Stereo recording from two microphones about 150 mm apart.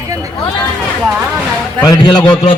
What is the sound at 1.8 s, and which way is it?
Speech, 30° left (ahead or behind).